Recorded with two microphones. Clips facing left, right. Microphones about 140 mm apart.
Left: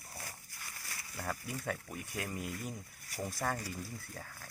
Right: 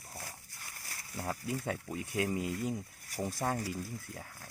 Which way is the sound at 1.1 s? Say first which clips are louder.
Right 4 dB; 20° right (ahead or behind).